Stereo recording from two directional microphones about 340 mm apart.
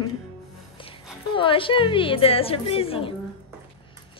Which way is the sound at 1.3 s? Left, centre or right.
Centre.